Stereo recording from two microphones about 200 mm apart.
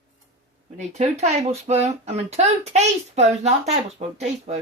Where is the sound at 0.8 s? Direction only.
35° right (ahead or behind).